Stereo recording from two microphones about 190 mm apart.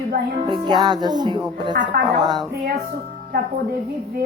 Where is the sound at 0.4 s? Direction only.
25° right (ahead or behind).